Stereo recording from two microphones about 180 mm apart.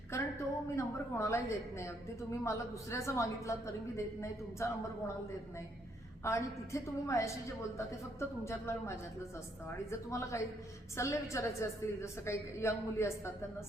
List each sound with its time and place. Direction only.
0.1 s a woman's voice: 15° left (ahead or behind)
6.2 s a woman's voice: 15° left (ahead or behind)